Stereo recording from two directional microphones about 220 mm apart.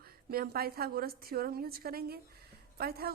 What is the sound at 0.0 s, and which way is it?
A woman's voice, 45° right (ahead or behind).